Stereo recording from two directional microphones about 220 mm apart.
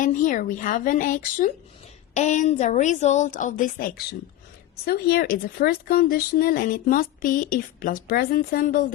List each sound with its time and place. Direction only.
0.0 s speech: 35° left (ahead or behind)